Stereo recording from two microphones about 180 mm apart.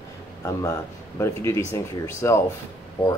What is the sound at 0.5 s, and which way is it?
Speech, 15° left (ahead or behind).